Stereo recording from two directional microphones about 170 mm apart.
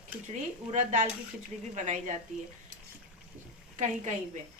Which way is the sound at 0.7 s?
45° right (ahead or behind).